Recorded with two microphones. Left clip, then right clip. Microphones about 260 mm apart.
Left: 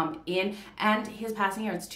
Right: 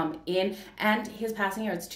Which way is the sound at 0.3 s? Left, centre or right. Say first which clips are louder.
Right 1 dB; centre.